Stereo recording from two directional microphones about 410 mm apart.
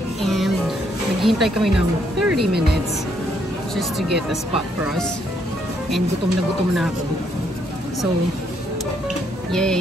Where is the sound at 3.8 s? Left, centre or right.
Centre.